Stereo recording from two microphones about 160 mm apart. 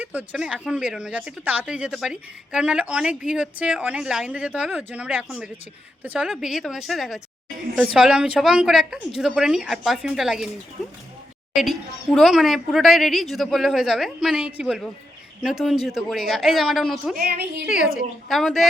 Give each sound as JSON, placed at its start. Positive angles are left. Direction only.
{"t": 0.0, "sound": "speech", "side_deg": -10}
{"t": 11.5, "sound": "speech", "side_deg": 0}
{"t": 17.2, "sound": "a woman's voice", "side_deg": -70}
{"t": 18.3, "sound": "speech", "side_deg": 0}